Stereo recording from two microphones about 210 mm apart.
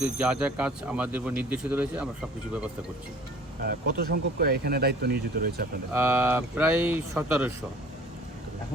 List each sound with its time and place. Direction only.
0.0 s speech: 5° right (ahead or behind)
3.6 s speech: 50° right (ahead or behind)
5.9 s speech: 10° right (ahead or behind)